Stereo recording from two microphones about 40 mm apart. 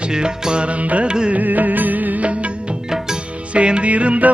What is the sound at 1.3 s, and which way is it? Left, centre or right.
Music, right.